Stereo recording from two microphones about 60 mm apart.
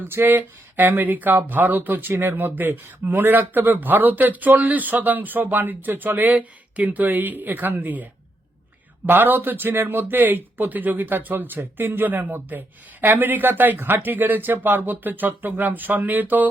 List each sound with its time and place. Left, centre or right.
0.1 s speech: right
9.0 s speech: right